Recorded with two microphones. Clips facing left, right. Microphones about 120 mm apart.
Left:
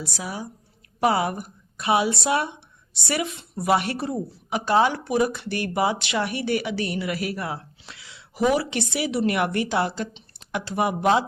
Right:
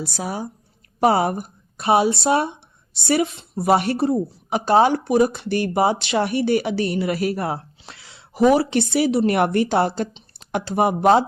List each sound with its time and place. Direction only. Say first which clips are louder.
0.0 s speech: right 5 dB; 40° right (ahead or behind)